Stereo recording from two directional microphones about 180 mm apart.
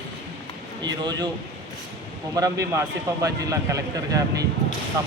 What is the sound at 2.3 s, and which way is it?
Speech, 20° right (ahead or behind).